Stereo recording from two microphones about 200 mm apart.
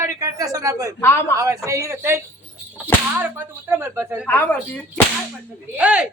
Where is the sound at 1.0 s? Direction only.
10° left (ahead or behind).